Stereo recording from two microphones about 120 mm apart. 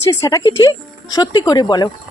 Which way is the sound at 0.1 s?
30° left (ahead or behind).